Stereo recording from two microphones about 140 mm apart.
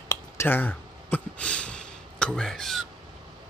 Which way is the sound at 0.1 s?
15° left (ahead or behind).